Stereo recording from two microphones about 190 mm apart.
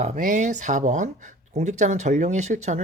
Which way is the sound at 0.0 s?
40° right (ahead or behind).